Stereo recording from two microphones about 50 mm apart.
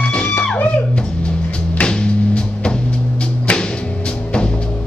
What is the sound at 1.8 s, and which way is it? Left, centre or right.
Music, centre.